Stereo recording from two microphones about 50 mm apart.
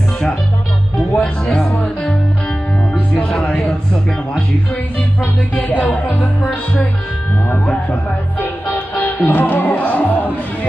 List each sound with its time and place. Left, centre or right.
1.4 s music: centre
5.2 s music: left